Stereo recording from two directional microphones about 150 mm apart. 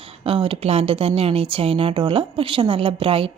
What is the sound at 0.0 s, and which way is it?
Speech, 40° right (ahead or behind).